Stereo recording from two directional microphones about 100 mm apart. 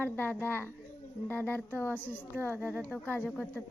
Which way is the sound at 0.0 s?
20° left (ahead or behind).